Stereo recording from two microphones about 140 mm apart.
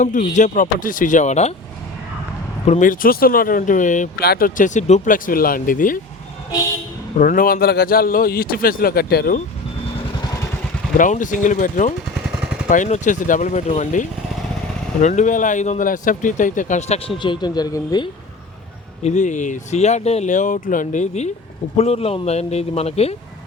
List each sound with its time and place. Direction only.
0.0 s speech: 65° left (ahead or behind)
2.6 s speech: 60° left (ahead or behind)
7.2 s a man's voice: 80° left
10.9 s speech: 70° left (ahead or behind); by 17.2 s 50° left (ahead or behind)
17.2 s speech: 30° left (ahead or behind)
19.0 s speech: 60° left (ahead or behind)
21.8 s a man's voice: 45° left (ahead or behind)